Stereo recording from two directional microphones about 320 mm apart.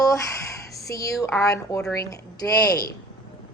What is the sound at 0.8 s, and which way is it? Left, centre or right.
A woman's voice, centre.